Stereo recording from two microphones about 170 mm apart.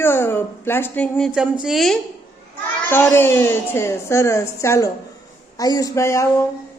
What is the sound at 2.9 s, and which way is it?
A woman's voice, 15° left (ahead or behind).